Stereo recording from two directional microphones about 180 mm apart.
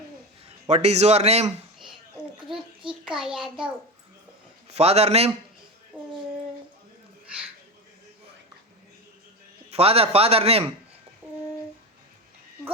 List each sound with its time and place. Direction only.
0.4 s a man's voice: 35° right (ahead or behind)
2.5 s a child's voice: 5° right (ahead or behind)
4.7 s a man's voice: 35° right (ahead or behind)
5.9 s child singing: 5° right (ahead or behind)
9.6 s a man's voice: 35° right (ahead or behind)